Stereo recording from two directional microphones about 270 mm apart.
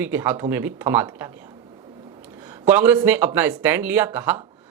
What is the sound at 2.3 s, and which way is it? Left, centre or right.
Speech, centre.